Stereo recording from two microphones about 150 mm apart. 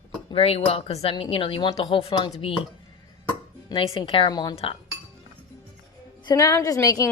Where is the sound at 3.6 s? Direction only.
35° left (ahead or behind).